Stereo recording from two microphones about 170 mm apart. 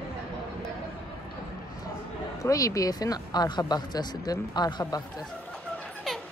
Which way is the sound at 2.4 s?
20° left (ahead or behind).